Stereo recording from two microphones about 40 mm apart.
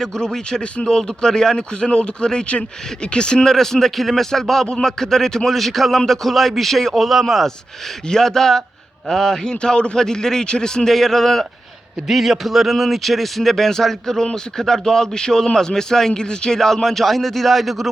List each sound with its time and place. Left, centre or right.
0.0 s a man's voice: centre
3.5 s a man's voice: centre
8.1 s a man's voice: centre
16.6 s a man's voice: centre